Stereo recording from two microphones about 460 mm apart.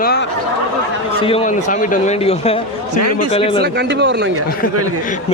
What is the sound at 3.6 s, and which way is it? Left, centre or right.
Speech, right.